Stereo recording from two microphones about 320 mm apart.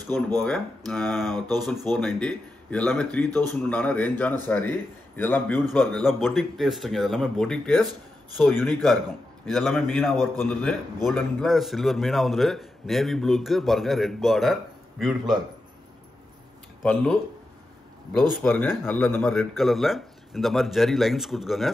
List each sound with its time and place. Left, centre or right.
0.4 s a man's voice: centre
16.8 s a man's voice: centre
18.4 s a man's voice: centre